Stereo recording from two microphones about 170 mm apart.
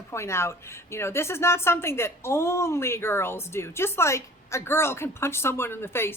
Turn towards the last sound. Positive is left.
turn(degrees=15)  # may be behind; listen again after turning